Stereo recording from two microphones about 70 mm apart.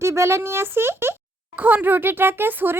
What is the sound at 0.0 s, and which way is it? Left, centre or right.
Speech, right.